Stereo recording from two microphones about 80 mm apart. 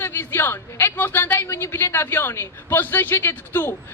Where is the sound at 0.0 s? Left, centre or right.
Left.